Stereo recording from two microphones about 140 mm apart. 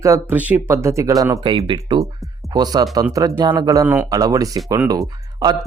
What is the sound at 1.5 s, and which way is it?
Speech, 35° right (ahead or behind).